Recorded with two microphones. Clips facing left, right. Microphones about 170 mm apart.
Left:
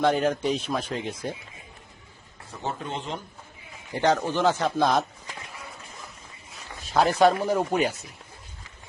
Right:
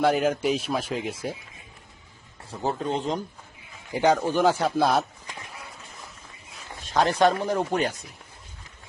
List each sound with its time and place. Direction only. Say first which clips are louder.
0.0 s a man's voice: right 1 dB; 5° right (ahead or behind)
2.5 s speech: right 5 dB; 35° right (ahead or behind)
3.9 s a man's voice: right 2 dB; 10° right (ahead or behind)
6.5 s a sound: left 1 dB; 5° left (ahead or behind)
7.2 s speech: left 1 dB; 5° left (ahead or behind)